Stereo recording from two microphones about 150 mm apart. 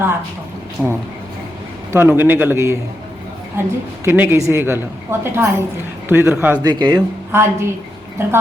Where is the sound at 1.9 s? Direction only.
15° right (ahead or behind).